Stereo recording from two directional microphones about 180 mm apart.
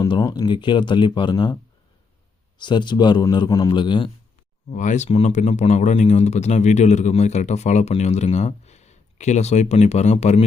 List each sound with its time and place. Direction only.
0.0 s speech: 25° left (ahead or behind)
2.6 s speech: 25° left (ahead or behind)
4.7 s speech: 45° left (ahead or behind)